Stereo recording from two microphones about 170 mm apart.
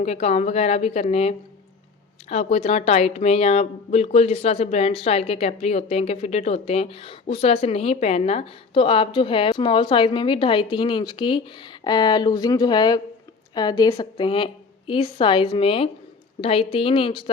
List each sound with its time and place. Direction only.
0.0 s a woman's voice: 40° left (ahead or behind)